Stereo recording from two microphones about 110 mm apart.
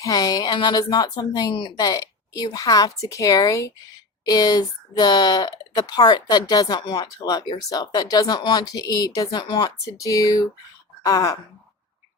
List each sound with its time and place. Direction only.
0.0 s speech: 30° left (ahead or behind)